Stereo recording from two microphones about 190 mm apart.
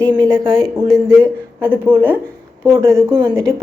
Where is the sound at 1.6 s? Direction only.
10° left (ahead or behind).